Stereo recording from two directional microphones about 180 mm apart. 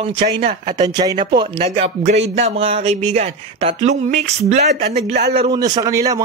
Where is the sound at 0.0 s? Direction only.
30° right (ahead or behind).